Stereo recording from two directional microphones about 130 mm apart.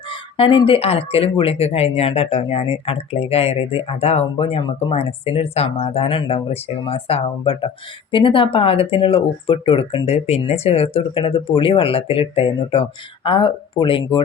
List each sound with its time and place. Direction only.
0.1 s speech: 40° left (ahead or behind)